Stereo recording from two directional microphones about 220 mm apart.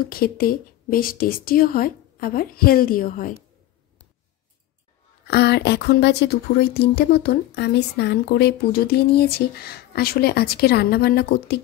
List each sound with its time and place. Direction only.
0.1 s speech: 40° left (ahead or behind)
5.3 s speech: 50° left (ahead or behind)